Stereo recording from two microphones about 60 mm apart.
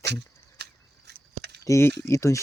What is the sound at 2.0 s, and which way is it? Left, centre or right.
Speech, left.